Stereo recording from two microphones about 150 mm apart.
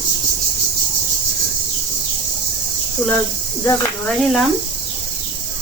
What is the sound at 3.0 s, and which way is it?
Speech, 20° left (ahead or behind).